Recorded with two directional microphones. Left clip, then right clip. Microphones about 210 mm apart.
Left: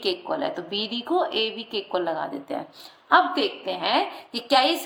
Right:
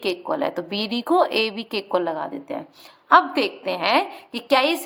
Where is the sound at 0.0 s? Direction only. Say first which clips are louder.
Right 2 dB; 30° right (ahead or behind).